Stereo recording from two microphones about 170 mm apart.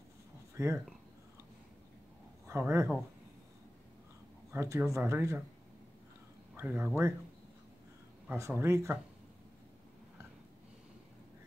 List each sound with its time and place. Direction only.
0.6 s speech: 15° right (ahead or behind)
2.4 s speech: 15° right (ahead or behind)
4.5 s speech: 15° right (ahead or behind)
6.5 s speech: 10° right (ahead or behind)
8.3 s speech: 15° right (ahead or behind)